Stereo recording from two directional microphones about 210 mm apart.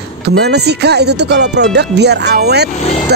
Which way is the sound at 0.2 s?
50° right (ahead or behind).